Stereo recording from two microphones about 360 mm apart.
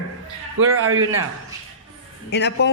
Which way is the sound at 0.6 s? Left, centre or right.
Right.